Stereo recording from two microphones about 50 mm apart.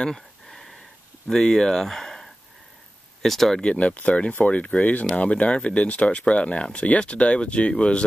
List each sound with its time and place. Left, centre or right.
0.1 s a sound: centre
1.2 s speech: centre
3.5 s speech: left